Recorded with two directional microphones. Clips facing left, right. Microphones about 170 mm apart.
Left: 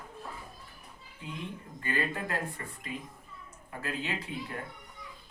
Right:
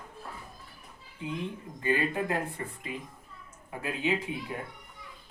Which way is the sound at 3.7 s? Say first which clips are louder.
Right 5 dB; 15° right (ahead or behind).